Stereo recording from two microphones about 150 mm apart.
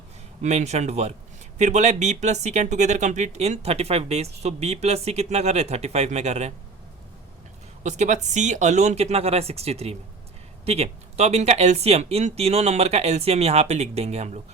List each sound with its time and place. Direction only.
0.4 s speech: 50° right (ahead or behind)
7.9 s speech: 50° right (ahead or behind)